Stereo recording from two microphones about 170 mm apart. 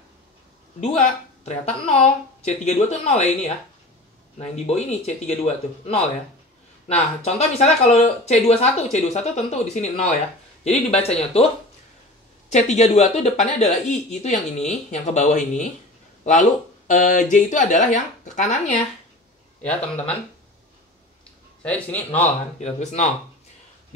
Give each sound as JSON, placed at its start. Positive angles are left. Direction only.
{"t": 0.7, "sound": "speech", "side_deg": 40}
{"t": 7.2, "sound": "speech", "side_deg": 40}
{"t": 12.4, "sound": "speech", "side_deg": 45}
{"t": 21.6, "sound": "a man's voice", "side_deg": 10}
{"t": 22.6, "sound": "speech", "side_deg": 40}